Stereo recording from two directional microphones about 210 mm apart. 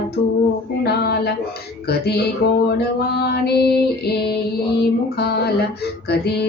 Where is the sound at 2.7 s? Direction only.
50° left (ahead or behind).